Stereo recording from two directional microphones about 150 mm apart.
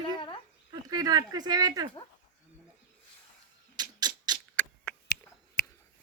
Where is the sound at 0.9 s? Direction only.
25° right (ahead or behind).